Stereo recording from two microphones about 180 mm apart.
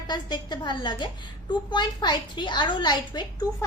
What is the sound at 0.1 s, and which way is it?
A woman's voice, 25° left (ahead or behind).